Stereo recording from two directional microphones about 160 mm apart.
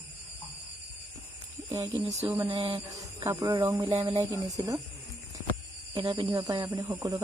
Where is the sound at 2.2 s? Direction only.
20° right (ahead or behind).